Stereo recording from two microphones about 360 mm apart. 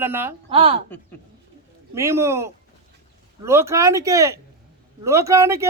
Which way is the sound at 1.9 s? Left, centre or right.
Centre.